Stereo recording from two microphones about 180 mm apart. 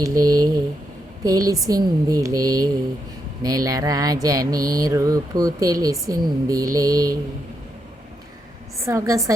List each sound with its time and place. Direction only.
0.0 s speech: 20° right (ahead or behind)
1.2 s mantra: 20° right (ahead or behind)
8.9 s a woman's voice: 20° right (ahead or behind)